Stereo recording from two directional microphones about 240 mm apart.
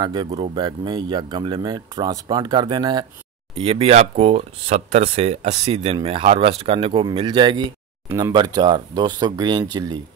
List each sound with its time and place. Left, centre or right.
0.0 s speech: centre